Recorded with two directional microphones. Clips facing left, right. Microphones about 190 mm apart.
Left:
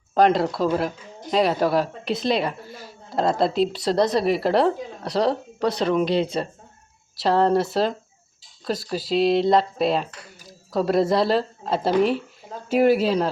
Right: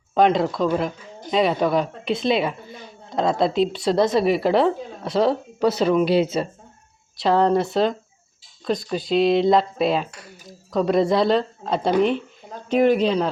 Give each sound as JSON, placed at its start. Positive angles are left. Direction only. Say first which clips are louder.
{"t": 0.1, "sound": "speech", "louder": "even", "side_deg": 0}